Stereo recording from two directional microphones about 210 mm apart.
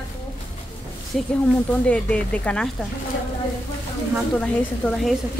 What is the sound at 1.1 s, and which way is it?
A woman's voice, centre (ahead or behind).